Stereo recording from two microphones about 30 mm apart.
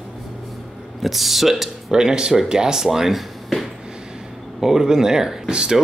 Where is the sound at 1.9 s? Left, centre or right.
Right.